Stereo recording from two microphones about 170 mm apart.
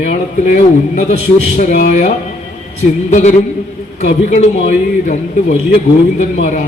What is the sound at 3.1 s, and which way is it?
A man's voice, 45° left (ahead or behind).